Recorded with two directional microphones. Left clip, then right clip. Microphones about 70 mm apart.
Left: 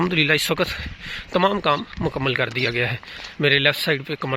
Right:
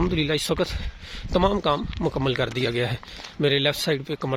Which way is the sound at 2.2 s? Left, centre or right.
Right.